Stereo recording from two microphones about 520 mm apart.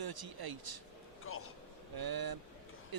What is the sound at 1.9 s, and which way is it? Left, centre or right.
Speech, right.